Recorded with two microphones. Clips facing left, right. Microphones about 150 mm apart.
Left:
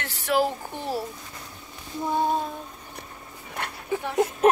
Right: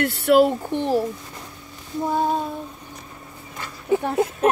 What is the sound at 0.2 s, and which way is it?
Speech, 60° right (ahead or behind).